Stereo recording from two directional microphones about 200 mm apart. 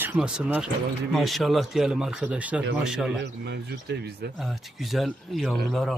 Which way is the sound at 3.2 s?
60° right (ahead or behind).